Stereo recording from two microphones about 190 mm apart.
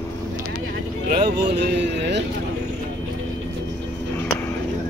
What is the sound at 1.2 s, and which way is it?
Speech, 60° right (ahead or behind).